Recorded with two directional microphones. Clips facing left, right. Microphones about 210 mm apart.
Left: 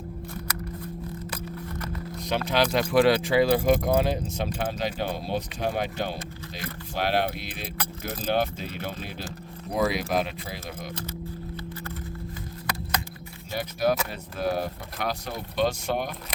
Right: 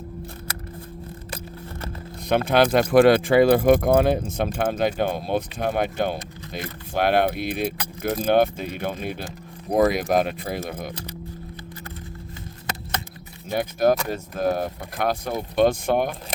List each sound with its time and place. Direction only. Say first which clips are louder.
1.3 s a sound: left 1 dB; 30° right (ahead or behind)
2.1 s speech: right 6 dB; 55° right (ahead or behind)
13.5 s speech: right 5 dB; 50° right (ahead or behind)